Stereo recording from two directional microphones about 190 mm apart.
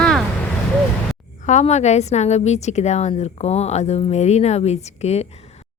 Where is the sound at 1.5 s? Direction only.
35° left (ahead or behind).